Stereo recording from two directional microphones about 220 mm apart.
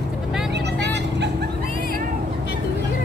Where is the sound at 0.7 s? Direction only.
50° right (ahead or behind).